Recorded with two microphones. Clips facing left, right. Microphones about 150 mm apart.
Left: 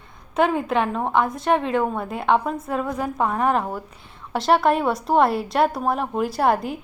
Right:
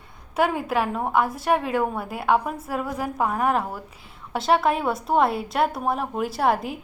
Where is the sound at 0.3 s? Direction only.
5° right (ahead or behind).